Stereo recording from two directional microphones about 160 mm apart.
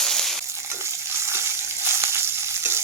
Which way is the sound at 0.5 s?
15° right (ahead or behind).